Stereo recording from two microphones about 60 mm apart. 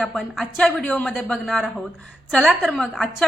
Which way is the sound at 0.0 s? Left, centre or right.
Centre.